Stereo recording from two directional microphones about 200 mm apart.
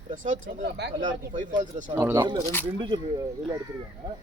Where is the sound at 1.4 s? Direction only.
40° right (ahead or behind).